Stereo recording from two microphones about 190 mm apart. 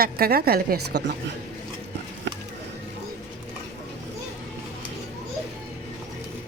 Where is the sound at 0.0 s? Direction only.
55° right (ahead or behind).